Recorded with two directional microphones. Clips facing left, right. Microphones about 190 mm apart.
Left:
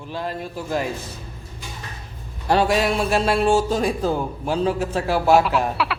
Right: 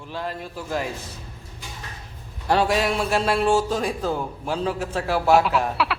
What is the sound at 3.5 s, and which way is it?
A man's voice, 15° left (ahead or behind).